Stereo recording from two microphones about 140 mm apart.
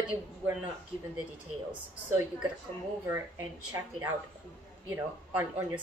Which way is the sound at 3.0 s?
20° right (ahead or behind).